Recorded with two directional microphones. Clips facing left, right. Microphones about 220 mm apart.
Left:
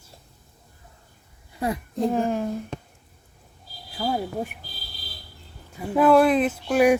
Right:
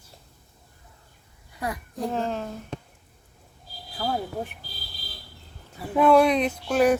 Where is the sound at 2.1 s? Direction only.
10° left (ahead or behind).